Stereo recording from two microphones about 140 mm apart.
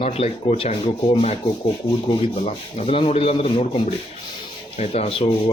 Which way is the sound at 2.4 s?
45° left (ahead or behind).